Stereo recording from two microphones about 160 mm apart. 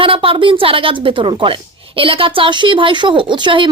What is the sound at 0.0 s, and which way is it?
A woman's voice, 35° right (ahead or behind).